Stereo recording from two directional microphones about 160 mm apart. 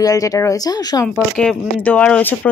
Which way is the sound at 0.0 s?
20° left (ahead or behind).